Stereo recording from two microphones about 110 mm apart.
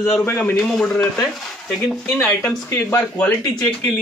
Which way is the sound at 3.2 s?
15° left (ahead or behind).